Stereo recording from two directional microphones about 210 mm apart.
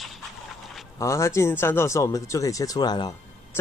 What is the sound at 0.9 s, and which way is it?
Speech, 15° left (ahead or behind).